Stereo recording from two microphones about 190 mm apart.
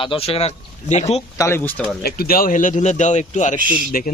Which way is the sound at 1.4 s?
15° left (ahead or behind).